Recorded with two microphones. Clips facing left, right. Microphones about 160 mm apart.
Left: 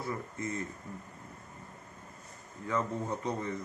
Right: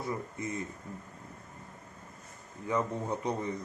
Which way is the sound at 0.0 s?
15° right (ahead or behind).